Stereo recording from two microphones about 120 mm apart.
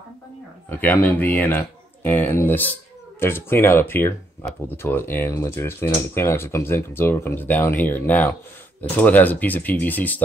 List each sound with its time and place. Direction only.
0.7 s speech: 15° left (ahead or behind)